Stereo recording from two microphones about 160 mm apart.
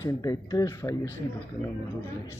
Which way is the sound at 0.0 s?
20° left (ahead or behind).